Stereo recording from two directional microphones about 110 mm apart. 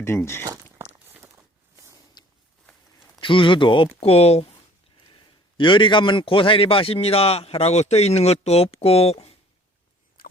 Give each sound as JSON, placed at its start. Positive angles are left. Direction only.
{"t": 0.0, "sound": "speech", "side_deg": 20}
{"t": 0.8, "sound": "walk", "side_deg": -20}
{"t": 3.2, "sound": "speech", "side_deg": 50}
{"t": 5.5, "sound": "a man's voice", "side_deg": 50}